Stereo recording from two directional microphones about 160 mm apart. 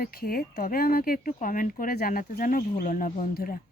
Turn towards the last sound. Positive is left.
turn(degrees=60)  # may be behind; listen again after turning